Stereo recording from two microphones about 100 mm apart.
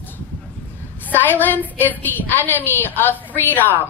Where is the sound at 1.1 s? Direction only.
20° left (ahead or behind).